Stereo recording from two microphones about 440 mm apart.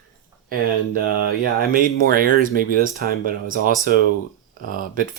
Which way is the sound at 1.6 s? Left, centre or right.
Centre.